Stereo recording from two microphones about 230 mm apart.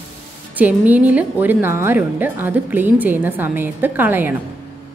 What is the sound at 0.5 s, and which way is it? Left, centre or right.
A woman's voice, centre.